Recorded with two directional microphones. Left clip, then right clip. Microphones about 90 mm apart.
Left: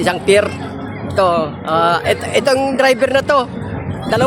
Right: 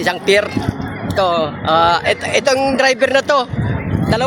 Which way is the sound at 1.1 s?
20° right (ahead or behind).